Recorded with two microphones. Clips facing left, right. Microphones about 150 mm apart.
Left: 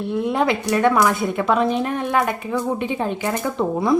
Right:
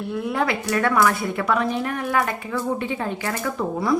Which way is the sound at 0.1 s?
20° left (ahead or behind).